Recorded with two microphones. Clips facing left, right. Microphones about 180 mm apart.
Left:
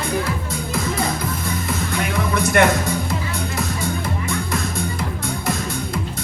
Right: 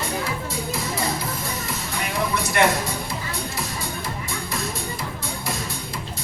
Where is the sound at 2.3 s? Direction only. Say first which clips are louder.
Left 5 dB; 50° left (ahead or behind).